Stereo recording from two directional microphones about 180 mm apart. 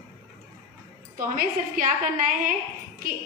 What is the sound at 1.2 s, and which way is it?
A woman's voice, 50° right (ahead or behind).